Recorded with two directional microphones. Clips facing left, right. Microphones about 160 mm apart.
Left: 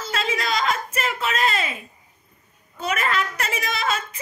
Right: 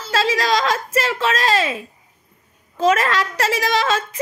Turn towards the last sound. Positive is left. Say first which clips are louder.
# right 7 dB
turn(degrees=-90)